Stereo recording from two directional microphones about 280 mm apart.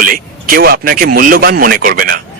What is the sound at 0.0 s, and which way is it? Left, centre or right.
Speech, right.